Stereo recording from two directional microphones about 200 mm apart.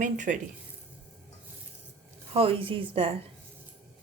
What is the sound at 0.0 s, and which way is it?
Frying, 40° right (ahead or behind).